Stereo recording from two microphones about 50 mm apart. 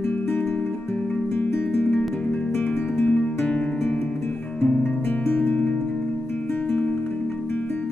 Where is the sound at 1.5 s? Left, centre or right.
Left.